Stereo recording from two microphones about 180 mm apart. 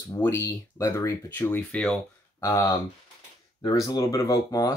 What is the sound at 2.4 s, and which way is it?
Speech, 15° left (ahead or behind).